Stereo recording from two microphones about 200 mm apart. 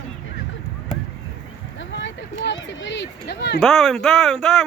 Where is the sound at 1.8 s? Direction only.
65° left (ahead or behind).